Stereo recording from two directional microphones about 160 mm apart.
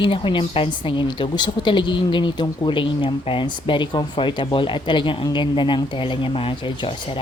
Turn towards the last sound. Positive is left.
turn(degrees=30)  # may be behind; listen again after turning